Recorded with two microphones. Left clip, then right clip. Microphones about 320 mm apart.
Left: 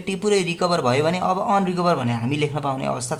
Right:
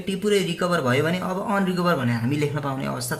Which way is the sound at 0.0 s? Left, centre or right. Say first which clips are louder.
Left 2 dB; centre.